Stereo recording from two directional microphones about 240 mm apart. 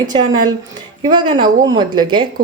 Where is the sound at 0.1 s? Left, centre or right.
Centre.